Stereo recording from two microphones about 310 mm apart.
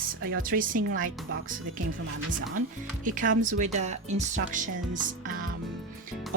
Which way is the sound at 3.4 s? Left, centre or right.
Right.